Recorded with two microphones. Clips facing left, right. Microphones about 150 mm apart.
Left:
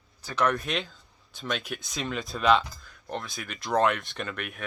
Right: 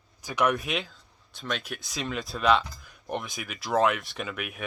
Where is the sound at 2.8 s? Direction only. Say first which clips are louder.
Right 2 dB; 20° right (ahead or behind).